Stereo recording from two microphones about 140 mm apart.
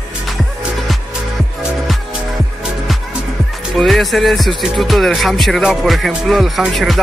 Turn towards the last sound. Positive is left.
turn(degrees=0)  # may be behind; listen again after turning